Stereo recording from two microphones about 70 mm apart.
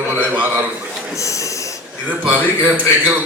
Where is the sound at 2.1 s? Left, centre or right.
Right.